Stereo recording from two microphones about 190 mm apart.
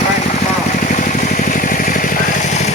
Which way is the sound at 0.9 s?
40° left (ahead or behind).